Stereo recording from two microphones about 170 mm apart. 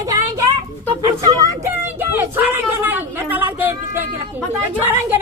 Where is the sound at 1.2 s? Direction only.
20° right (ahead or behind).